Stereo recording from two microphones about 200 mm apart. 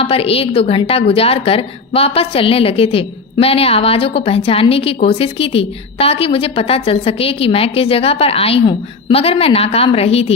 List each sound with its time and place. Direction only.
0.0 s a woman's voice: 30° left (ahead or behind)